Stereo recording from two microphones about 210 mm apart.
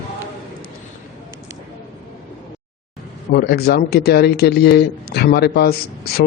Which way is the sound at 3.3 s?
45° left (ahead or behind).